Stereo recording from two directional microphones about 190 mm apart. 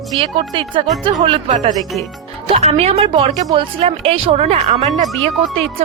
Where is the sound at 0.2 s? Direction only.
30° right (ahead or behind).